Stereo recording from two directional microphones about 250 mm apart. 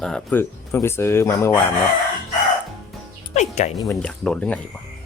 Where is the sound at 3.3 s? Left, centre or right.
Left.